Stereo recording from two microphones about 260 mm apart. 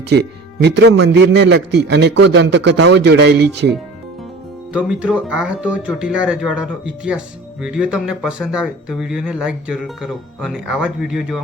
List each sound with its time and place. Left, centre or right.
0.6 s a man's voice: right
4.7 s speech: centre